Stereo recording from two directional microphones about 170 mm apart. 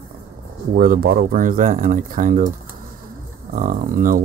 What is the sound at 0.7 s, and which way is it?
Speech, 55° right (ahead or behind).